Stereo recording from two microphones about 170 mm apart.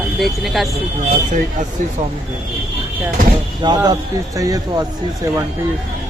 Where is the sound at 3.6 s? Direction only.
25° right (ahead or behind).